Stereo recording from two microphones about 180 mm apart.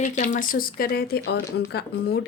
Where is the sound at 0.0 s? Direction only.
45° left (ahead or behind).